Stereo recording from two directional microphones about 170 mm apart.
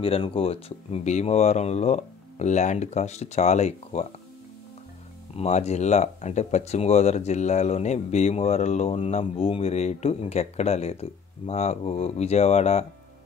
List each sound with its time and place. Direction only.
0.0 s speech: 35° left (ahead or behind)
5.3 s speech: 40° left (ahead or behind)